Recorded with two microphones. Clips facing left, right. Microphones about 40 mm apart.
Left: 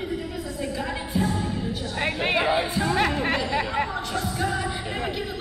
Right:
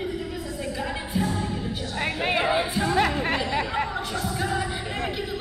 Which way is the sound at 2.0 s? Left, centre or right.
Left.